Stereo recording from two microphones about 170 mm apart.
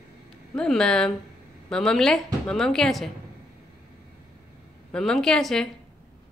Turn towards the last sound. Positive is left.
turn(degrees=0)  # may be behind; listen again after turning